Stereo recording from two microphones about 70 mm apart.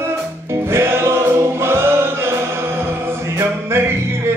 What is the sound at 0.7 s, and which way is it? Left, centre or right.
Choir, right.